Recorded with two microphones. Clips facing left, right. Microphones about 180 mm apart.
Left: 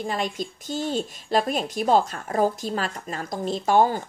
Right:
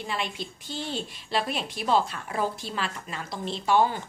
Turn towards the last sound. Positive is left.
turn(degrees=45)  # may be behind; listen again after turning